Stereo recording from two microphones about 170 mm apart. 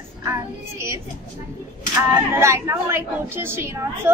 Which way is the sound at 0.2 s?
15° right (ahead or behind).